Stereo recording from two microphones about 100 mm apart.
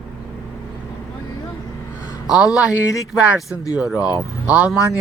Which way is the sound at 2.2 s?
5° right (ahead or behind).